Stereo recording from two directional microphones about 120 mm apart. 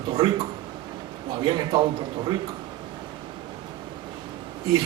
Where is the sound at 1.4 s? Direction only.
40° right (ahead or behind).